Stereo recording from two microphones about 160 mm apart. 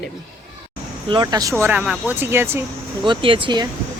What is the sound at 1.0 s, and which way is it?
Speech, 25° right (ahead or behind).